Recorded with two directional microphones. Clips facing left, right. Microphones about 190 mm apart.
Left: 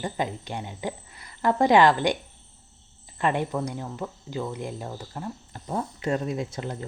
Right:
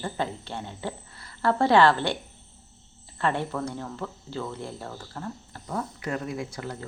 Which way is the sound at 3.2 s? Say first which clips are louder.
Left 2 dB; 15° left (ahead or behind).